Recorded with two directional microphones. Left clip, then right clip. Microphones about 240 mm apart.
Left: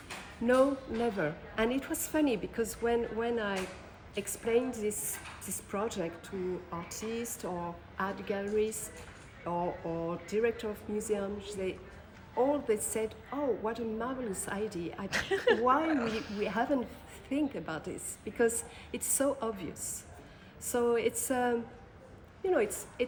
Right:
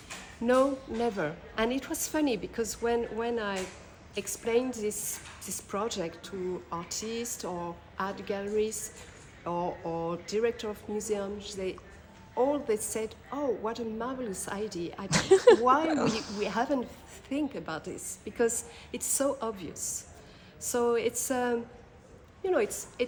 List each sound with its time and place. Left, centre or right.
1.0 s a woman's voice: centre
15.1 s speech: right
15.6 s a woman's voice: centre
15.9 s speech: right
16.4 s a woman's voice: centre